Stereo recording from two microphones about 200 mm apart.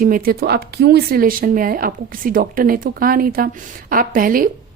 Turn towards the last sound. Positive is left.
turn(degrees=-45)  # may be behind; listen again after turning